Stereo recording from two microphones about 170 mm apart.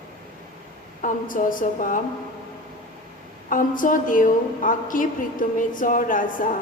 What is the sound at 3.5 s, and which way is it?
A woman's voice, 50° left (ahead or behind).